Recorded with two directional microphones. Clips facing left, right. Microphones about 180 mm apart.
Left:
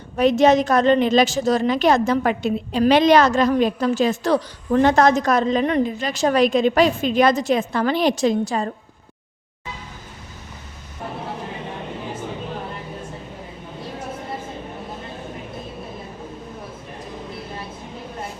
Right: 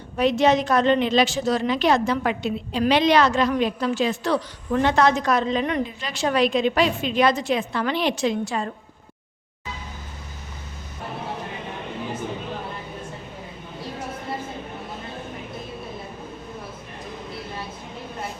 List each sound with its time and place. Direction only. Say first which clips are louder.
0.2 s a woman's voice: left 4 dB; 45° left (ahead or behind)